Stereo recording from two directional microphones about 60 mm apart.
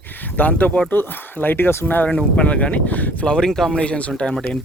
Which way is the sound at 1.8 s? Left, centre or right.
Left.